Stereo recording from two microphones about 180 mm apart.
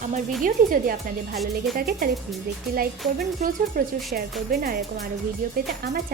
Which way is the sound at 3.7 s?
50° right (ahead or behind).